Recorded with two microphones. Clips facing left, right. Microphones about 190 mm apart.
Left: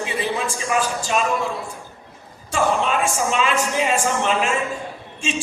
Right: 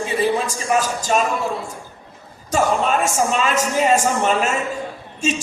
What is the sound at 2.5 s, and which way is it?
A man's voice, 40° right (ahead or behind).